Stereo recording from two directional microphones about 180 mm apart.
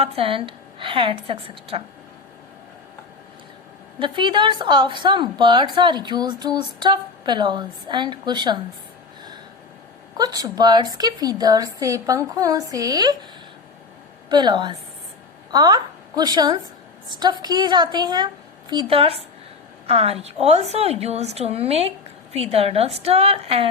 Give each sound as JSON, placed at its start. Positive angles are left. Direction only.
{"t": 0.0, "sound": "a woman's voice", "side_deg": -30}
{"t": 4.0, "sound": "a woman's voice", "side_deg": -25}
{"t": 10.2, "sound": "a woman's voice", "side_deg": -20}
{"t": 14.3, "sound": "a woman's voice", "side_deg": -25}